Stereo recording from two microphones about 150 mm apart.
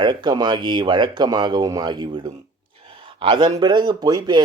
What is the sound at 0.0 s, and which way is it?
Speech, 30° right (ahead or behind).